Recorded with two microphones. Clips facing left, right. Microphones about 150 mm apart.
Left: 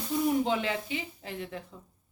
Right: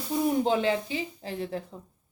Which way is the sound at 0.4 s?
30° right (ahead or behind).